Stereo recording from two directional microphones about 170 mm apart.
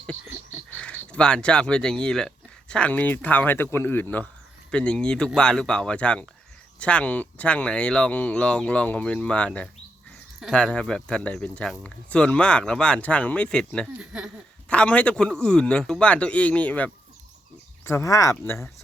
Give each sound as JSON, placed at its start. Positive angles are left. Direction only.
{"t": 0.7, "sound": "speech", "side_deg": 5}
{"t": 14.7, "sound": "speech", "side_deg": 5}